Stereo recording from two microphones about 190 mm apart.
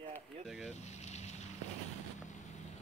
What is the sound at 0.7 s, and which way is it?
Vehicle, 35° left (ahead or behind).